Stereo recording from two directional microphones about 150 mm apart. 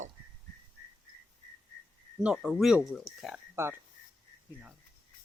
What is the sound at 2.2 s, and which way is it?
Speech, 5° right (ahead or behind).